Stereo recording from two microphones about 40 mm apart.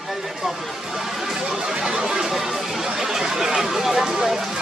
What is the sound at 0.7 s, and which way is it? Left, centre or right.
Music, centre.